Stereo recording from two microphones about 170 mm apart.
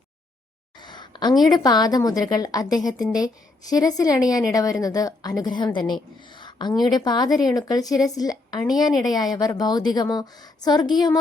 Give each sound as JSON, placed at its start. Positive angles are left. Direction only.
{"t": 0.8, "sound": "a woman's voice", "side_deg": 25}